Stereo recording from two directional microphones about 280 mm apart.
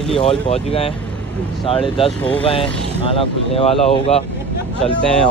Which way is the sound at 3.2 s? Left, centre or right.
Centre.